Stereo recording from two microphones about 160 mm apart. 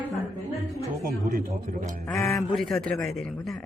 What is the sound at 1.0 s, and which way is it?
Speech, 60° right (ahead or behind).